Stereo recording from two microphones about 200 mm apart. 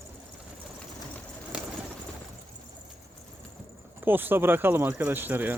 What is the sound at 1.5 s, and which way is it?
Bird, 5° right (ahead or behind).